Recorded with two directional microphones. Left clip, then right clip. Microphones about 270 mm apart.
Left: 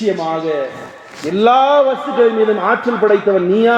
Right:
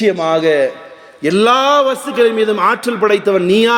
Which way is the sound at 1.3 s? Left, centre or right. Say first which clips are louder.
Even; right.